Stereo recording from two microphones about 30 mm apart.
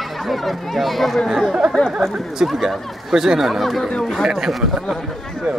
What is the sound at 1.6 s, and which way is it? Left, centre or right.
Speech, centre.